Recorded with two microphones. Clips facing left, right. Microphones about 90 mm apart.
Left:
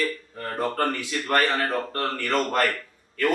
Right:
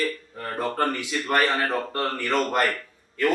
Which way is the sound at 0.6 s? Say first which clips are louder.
Even; 10° right (ahead or behind).